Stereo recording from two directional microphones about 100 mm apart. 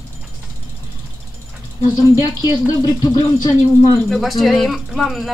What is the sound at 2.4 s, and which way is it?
Speech, 40° left (ahead or behind).